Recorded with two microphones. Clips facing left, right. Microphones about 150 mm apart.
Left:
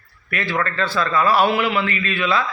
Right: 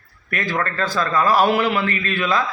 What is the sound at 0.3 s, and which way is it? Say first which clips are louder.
A man's voice: even; 40° right (ahead or behind).